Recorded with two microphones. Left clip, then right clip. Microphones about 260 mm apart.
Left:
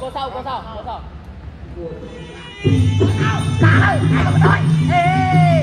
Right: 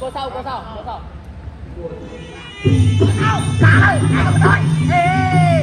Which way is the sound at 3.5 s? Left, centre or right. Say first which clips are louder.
Right 2 dB; left.